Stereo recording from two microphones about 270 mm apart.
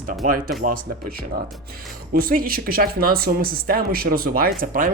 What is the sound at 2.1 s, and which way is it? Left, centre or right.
Speech, right.